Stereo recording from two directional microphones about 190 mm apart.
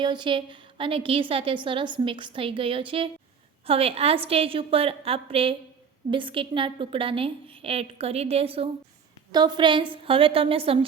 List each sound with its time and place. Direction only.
0.0 s a woman's voice: 25° right (ahead or behind)